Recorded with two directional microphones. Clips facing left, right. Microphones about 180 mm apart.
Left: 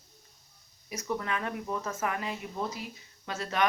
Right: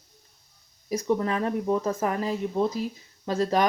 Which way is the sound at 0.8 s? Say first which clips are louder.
Right 9 dB; 30° right (ahead or behind).